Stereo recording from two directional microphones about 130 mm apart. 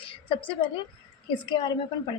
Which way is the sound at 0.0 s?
40° left (ahead or behind).